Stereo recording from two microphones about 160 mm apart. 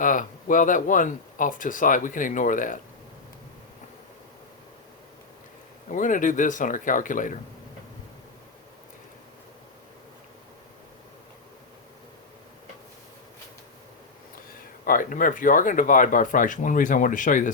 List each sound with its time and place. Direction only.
0.0 s speech: 55° left (ahead or behind)
5.9 s speech: 55° left (ahead or behind)
14.8 s speech: 55° left (ahead or behind)